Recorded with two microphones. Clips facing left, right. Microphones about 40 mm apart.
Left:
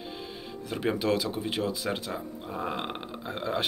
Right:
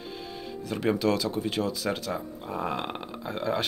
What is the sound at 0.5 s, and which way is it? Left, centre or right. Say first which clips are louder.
Speech: right 3 dB; left.